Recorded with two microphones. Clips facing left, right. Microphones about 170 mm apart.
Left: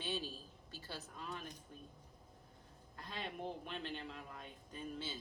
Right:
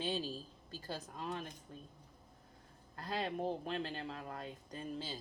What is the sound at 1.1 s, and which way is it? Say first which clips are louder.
Speech: right 6 dB; 45° right (ahead or behind).